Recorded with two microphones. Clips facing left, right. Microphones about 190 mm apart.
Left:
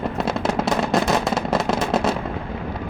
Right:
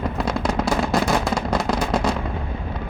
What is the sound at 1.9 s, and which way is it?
Fireworks, 5° left (ahead or behind).